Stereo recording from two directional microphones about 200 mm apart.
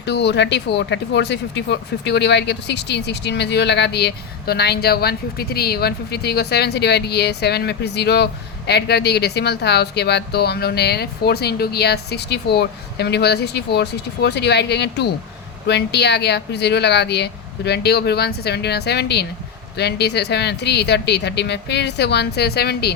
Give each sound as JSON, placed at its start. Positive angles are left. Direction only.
{"t": 0.0, "sound": "speech", "side_deg": 55}